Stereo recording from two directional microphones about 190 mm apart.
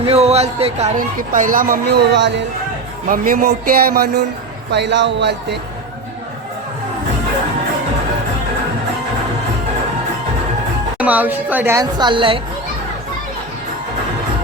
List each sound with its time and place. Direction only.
0.0 s speech: 35° right (ahead or behind); by 2.4 s 65° right (ahead or behind)
3.1 s speech: 45° right (ahead or behind)
4.7 s speech: 65° right (ahead or behind)
10.9 s a woman's voice: 5° right (ahead or behind); by 12.4 s 25° right (ahead or behind)